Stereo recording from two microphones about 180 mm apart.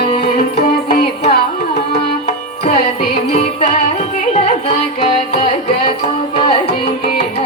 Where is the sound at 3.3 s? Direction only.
35° left (ahead or behind).